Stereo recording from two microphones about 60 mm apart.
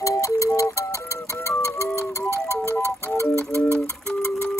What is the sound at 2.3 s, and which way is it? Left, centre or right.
Clock, left.